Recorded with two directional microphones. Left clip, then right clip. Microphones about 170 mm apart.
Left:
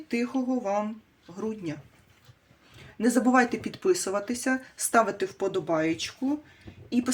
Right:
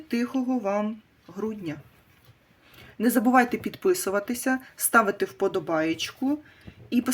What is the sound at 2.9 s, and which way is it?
Speech, 25° right (ahead or behind).